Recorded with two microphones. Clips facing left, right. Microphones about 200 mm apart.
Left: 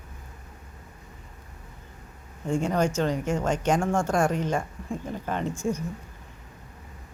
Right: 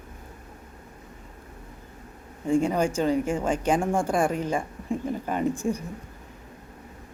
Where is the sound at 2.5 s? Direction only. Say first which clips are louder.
Right 2 dB; 5° right (ahead or behind).